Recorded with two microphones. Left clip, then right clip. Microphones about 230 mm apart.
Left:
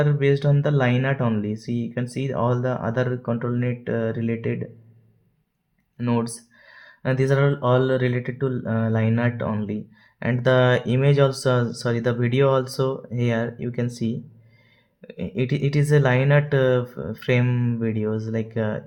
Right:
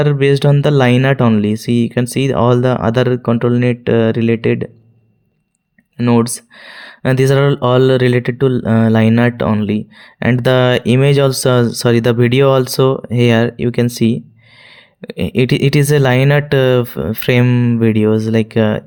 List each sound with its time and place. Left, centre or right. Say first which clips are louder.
0.0 s speech: right 9 dB; right
6.0 s speech: right 11 dB; right